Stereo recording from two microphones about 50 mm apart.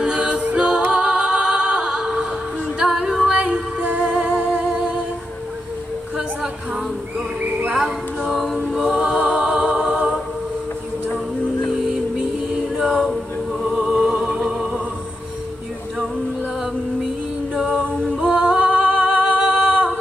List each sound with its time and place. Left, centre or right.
0.0 s a capella: centre
0.6 s music: centre
2.8 s female singing: centre
3.3 s music: right
4.3 s humming: right
6.1 s a sound: centre
7.7 s a capella: centre
8.7 s a capella: centre
11.7 s music: centre
12.9 s a capella: centre
13.7 s music: centre
17.6 s singing: right